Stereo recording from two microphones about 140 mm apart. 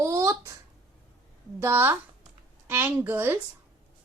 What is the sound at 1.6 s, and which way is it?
A woman's voice, 15° right (ahead or behind).